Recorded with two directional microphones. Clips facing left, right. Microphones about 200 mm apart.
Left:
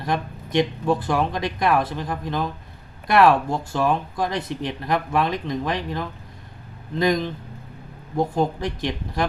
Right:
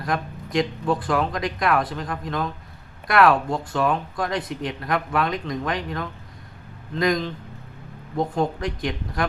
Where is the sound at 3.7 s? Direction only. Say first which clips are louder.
Left 1 dB; 25° left (ahead or behind).